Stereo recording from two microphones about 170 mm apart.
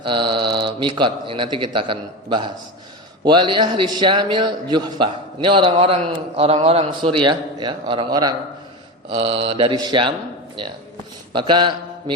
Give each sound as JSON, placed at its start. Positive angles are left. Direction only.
{"t": 0.0, "sound": "a man's voice", "side_deg": -30}
{"t": 9.1, "sound": "mantra", "side_deg": -35}
{"t": 10.6, "sound": "a man's voice", "side_deg": -30}
{"t": 11.3, "sound": "mantra", "side_deg": -30}